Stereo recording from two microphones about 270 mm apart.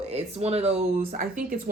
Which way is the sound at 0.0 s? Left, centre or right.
Right.